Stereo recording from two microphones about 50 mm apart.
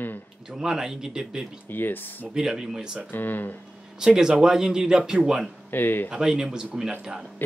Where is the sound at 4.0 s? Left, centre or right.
Centre.